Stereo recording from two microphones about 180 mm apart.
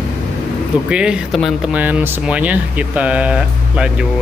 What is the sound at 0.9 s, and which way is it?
Speech, 5° right (ahead or behind).